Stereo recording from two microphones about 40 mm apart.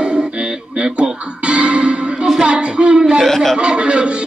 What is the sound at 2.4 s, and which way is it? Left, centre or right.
Speech, right.